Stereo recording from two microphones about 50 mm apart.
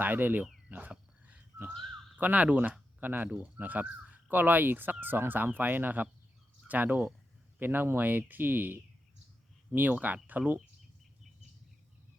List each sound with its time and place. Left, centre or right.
0.0 s speech: right
0.7 s frog: right
2.1 s speech: right
3.0 s speech: right
3.2 s speech: right